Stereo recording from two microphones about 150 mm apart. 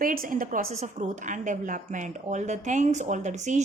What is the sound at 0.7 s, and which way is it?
A woman's voice, 50° right (ahead or behind).